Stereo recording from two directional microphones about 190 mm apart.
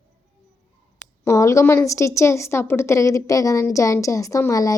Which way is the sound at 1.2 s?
15° left (ahead or behind).